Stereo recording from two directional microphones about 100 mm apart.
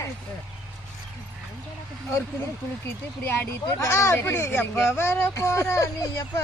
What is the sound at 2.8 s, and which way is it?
Speech, 20° left (ahead or behind).